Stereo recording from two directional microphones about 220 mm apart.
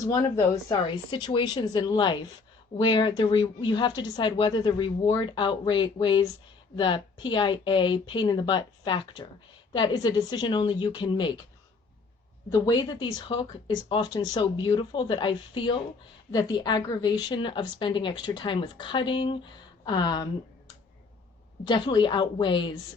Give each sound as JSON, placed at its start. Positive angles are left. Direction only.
{"t": 0.0, "sound": "speech", "side_deg": 15}
{"t": 12.5, "sound": "speech", "side_deg": 15}
{"t": 21.6, "sound": "speech", "side_deg": 20}